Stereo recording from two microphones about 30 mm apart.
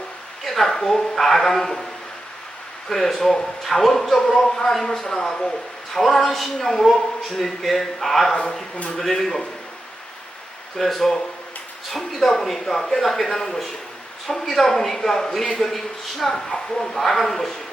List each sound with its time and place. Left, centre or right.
0.4 s speech: centre
2.9 s speech: centre
5.2 s speech: left
5.9 s speech: centre
10.8 s speech: centre
14.3 s speech: centre